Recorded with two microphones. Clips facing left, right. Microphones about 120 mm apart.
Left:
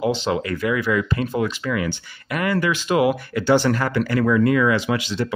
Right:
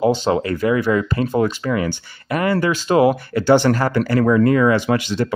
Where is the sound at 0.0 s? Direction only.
40° right (ahead or behind).